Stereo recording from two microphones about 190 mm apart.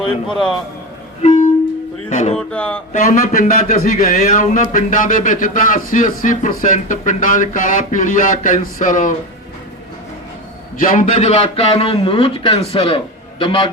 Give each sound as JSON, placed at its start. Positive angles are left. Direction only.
{"t": 0.3, "sound": "speech", "side_deg": 0}
{"t": 2.0, "sound": "music", "side_deg": 35}
{"t": 2.3, "sound": "speech", "side_deg": 5}
{"t": 2.9, "sound": "a man's voice", "side_deg": 45}
{"t": 10.8, "sound": "a man's voice", "side_deg": 45}